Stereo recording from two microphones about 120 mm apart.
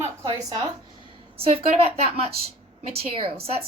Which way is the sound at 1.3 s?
55° right (ahead or behind).